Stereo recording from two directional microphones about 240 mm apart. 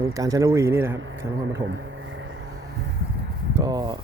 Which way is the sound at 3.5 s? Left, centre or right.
Centre.